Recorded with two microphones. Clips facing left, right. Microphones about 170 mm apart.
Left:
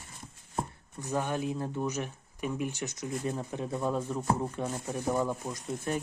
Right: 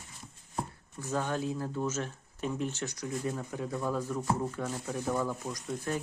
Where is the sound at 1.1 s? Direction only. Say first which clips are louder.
Left 1 dB; 15° left (ahead or behind).